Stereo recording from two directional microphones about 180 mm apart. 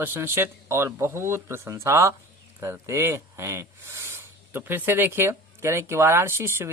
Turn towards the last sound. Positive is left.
turn(degrees=-15)  # may be behind; listen again after turning